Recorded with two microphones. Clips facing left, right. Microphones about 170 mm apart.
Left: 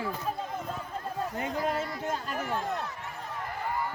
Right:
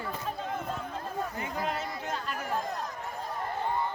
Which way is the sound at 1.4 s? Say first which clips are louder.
Left 3 dB; 50° left (ahead or behind).